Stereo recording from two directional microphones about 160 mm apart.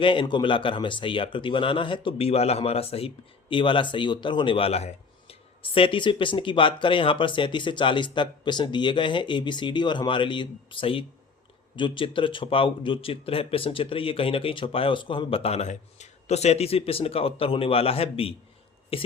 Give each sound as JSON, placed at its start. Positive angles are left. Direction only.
{"t": 0.0, "sound": "speech", "side_deg": 30}